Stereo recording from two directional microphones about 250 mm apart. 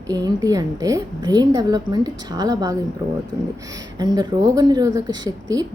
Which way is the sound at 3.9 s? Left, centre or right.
Centre.